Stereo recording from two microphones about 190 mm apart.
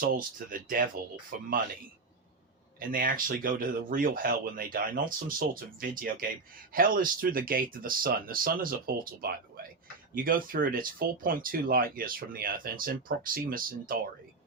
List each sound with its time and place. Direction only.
0.0 s speech: 50° right (ahead or behind)
2.8 s speech: 45° right (ahead or behind)